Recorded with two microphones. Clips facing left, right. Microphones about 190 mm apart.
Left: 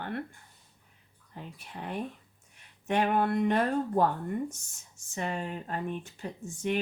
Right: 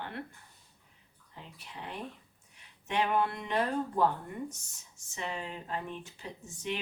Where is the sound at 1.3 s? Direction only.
50° left (ahead or behind).